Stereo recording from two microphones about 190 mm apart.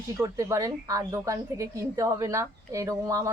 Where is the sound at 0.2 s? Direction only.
15° right (ahead or behind).